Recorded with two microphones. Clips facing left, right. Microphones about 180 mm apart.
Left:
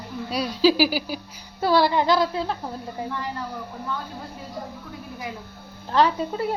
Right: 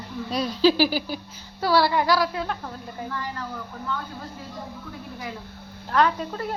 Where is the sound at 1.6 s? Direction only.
20° left (ahead or behind).